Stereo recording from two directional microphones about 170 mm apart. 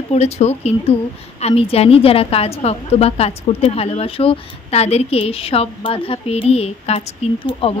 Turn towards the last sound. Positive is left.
turn(degrees=30)  # may be behind; listen again after turning